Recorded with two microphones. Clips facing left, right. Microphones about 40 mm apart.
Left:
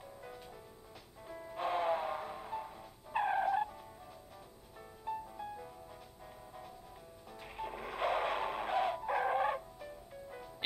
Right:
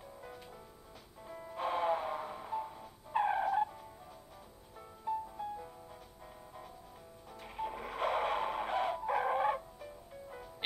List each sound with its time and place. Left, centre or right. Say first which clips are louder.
0.0 s music: even; centre
5.0 s music: right 4 dB; centre
7.3 s music: right 3 dB; centre